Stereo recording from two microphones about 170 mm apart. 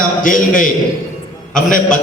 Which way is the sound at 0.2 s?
55° left (ahead or behind).